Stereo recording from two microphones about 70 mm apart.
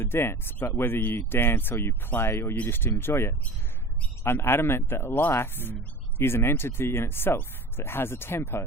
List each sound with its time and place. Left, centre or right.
0.0 s speech: left